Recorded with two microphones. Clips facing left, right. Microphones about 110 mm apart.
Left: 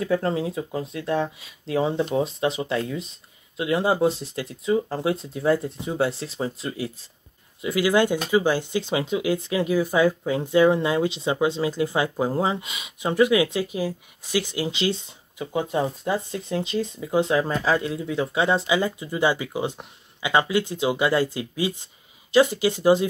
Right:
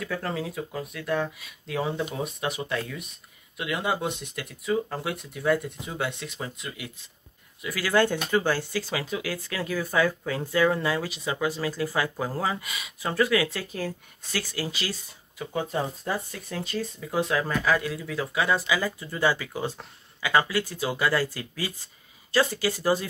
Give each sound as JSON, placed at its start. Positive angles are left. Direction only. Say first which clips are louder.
{"t": 0.0, "sound": "speech", "louder": "left 7 dB", "side_deg": 30}
{"t": 7.6, "sound": "speech", "louder": "left 4 dB", "side_deg": 20}